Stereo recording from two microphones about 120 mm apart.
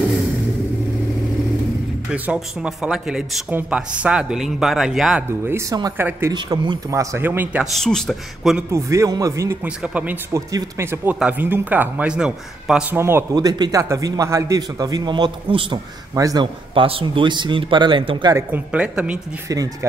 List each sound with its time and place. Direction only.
2.0 s a man's voice: 10° right (ahead or behind)
5.9 s a man's voice: 20° right (ahead or behind)
6.3 s a man's voice: 40° right (ahead or behind)
6.9 s speech: 25° right (ahead or behind)
7.7 s a man's voice: 5° left (ahead or behind)
8.7 s a man's voice: 25° right (ahead or behind); by 12.8 s 5° right (ahead or behind)
12.9 s speech: 20° right (ahead or behind)
13.3 s a man's voice: 35° right (ahead or behind)
16.7 s a man's voice: 50° right (ahead or behind)
18.5 s a man's voice: 10° right (ahead or behind)
19.5 s a man's voice: 30° right (ahead or behind)